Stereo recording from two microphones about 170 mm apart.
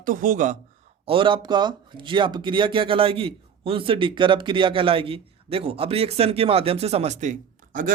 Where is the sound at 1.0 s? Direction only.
30° right (ahead or behind).